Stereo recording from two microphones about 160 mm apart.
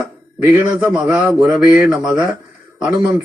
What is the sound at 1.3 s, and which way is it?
Mantra, 20° right (ahead or behind).